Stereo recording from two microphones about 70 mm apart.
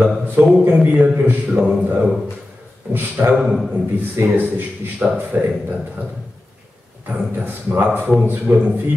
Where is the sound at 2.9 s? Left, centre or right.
Right.